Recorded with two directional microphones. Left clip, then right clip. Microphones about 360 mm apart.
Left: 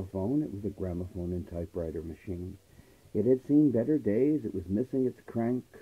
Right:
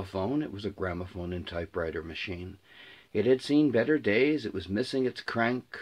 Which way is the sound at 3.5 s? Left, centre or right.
Right.